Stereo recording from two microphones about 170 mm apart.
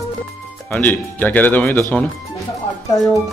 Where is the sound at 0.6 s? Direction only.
10° left (ahead or behind).